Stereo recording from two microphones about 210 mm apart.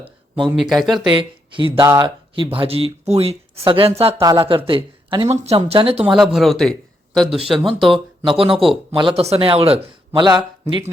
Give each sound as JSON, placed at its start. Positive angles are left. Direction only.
{"t": 0.5, "sound": "speech", "side_deg": 0}
{"t": 1.0, "sound": "speech", "side_deg": -25}
{"t": 6.1, "sound": "a man's voice", "side_deg": 0}
{"t": 8.4, "sound": "speech", "side_deg": -25}